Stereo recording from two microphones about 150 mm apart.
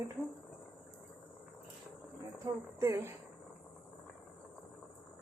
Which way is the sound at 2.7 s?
20° right (ahead or behind).